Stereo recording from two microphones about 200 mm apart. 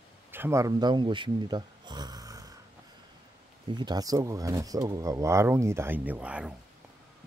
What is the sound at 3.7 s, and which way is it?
Speech, 20° right (ahead or behind).